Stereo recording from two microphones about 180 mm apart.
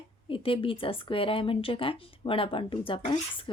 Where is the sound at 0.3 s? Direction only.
30° left (ahead or behind).